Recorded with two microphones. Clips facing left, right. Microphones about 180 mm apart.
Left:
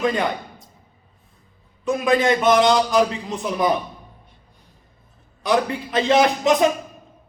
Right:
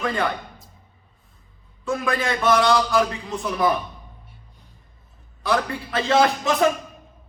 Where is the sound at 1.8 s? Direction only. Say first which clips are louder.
Left 6 dB; 20° left (ahead or behind).